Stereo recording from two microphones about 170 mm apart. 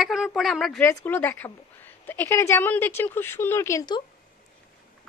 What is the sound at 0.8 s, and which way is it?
A woman's voice, 10° left (ahead or behind).